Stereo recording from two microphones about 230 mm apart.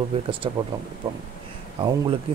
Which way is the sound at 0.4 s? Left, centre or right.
Right.